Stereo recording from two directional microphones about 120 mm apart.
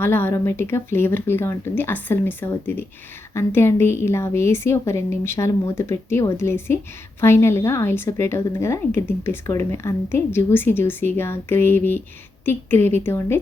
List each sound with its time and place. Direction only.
0.0 s a woman's voice: 20° left (ahead or behind)